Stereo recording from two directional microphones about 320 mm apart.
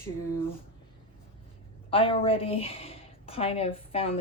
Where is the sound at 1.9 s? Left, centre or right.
Centre.